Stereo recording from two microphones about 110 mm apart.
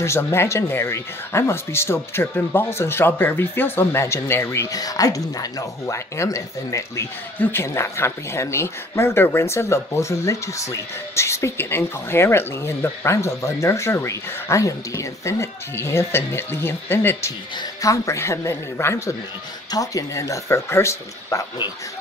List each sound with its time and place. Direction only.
0.0 s speech: 25° left (ahead or behind)